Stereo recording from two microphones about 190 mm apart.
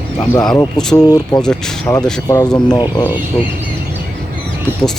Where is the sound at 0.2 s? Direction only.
20° left (ahead or behind).